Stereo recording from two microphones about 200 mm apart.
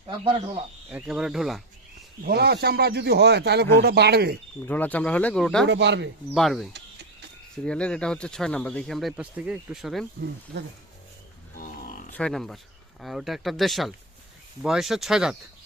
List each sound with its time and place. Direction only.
0.9 s speech: 5° right (ahead or behind)
2.2 s speech: 50° right (ahead or behind)
4.6 s speech: 10° left (ahead or behind)
5.6 s speech: 60° right (ahead or behind)
6.3 s speech: centre (ahead or behind)
10.5 s speech: 60° right (ahead or behind)
11.5 s a sound: 45° left (ahead or behind)
12.1 s speech: 5° left (ahead or behind)